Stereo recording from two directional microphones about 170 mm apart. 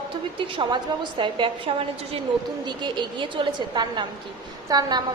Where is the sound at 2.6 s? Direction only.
25° right (ahead or behind).